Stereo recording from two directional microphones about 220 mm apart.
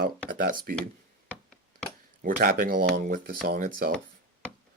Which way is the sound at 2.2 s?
40° right (ahead or behind).